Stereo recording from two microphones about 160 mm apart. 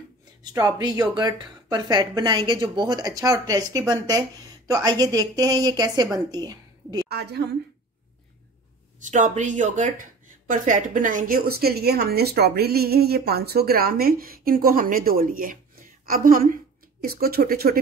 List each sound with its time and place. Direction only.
0.4 s a woman's voice: 25° right (ahead or behind)
7.1 s a woman's voice: 90° right
9.0 s speech: 50° right (ahead or behind); by 17.7 s 70° right (ahead or behind)